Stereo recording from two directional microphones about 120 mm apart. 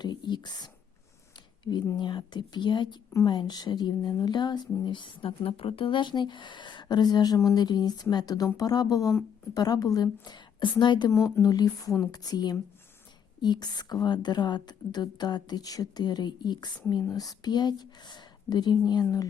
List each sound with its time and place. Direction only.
0.0 s speech: 40° left (ahead or behind)
2.0 s speech: 40° left (ahead or behind)
11.1 s speech: 25° left (ahead or behind)